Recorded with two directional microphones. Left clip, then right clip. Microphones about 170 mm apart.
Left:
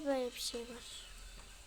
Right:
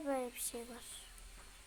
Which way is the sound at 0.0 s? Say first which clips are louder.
Left 3 dB; 15° left (ahead or behind).